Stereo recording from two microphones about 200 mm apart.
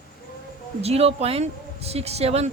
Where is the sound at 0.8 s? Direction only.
30° right (ahead or behind).